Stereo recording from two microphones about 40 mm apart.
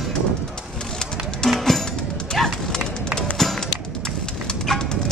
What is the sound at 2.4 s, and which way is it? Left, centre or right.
Horse, centre.